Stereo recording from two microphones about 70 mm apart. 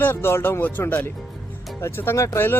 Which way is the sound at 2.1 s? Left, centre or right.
Left.